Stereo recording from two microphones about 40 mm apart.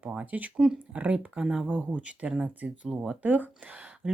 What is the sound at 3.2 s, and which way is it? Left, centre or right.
Speech, right.